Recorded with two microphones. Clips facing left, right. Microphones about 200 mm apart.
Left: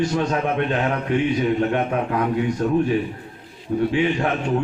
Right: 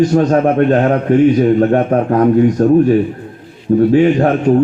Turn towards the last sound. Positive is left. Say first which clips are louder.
# right 10 dB
turn(degrees=-45)  # may be behind; listen again after turning